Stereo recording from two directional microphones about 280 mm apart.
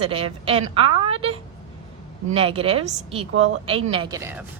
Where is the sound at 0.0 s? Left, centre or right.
Centre.